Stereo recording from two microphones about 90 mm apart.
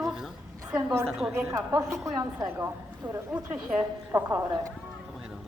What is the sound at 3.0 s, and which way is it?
Speech, 20° right (ahead or behind).